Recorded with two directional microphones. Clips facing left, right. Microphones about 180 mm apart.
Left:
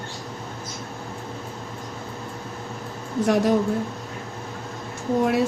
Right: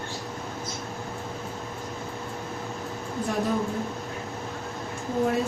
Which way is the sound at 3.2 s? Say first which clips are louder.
Left 8 dB; 80° left.